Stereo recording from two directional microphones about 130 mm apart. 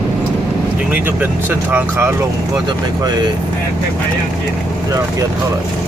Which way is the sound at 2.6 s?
35° right (ahead or behind).